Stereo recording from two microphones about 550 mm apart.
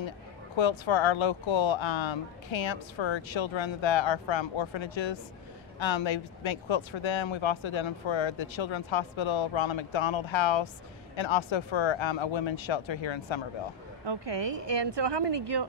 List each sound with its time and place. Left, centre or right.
0.6 s speech: left
14.0 s a woman's voice: right